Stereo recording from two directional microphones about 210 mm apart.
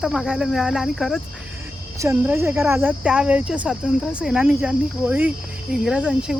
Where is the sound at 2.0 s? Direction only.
15° right (ahead or behind).